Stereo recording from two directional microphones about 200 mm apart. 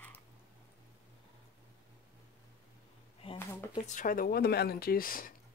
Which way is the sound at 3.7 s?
40° left (ahead or behind).